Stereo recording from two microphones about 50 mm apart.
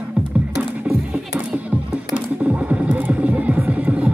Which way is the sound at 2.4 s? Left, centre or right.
Right.